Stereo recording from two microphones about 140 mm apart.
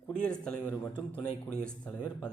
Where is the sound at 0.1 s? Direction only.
5° left (ahead or behind).